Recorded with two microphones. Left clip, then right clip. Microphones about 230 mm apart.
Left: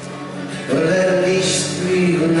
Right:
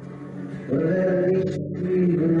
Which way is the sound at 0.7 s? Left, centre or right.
Centre.